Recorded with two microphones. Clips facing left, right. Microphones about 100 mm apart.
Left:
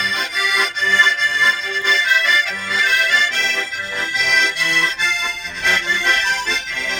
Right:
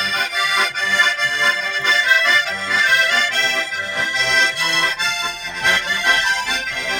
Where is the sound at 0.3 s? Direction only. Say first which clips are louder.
Even; 20° right (ahead or behind).